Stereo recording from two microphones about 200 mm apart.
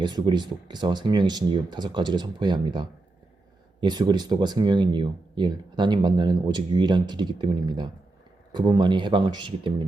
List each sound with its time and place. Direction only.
0.0 s speech: 20° right (ahead or behind)